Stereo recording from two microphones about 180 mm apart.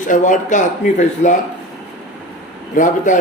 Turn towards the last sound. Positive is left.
turn(degrees=45)  # may be behind; listen again after turning